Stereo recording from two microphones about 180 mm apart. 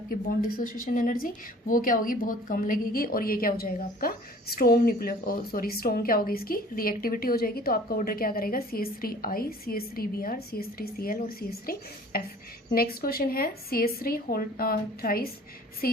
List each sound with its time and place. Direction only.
0.1 s a woman's voice: 50° left (ahead or behind)